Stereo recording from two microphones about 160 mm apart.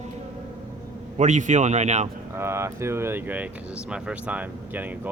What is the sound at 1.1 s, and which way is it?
Speech, 50° right (ahead or behind).